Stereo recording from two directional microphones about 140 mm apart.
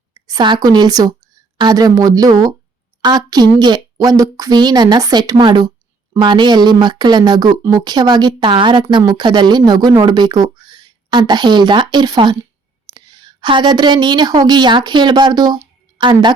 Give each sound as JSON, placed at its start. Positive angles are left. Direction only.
{"t": 0.1, "sound": "a woman's voice", "side_deg": -30}